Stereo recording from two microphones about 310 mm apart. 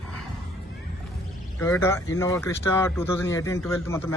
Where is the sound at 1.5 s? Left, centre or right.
Centre.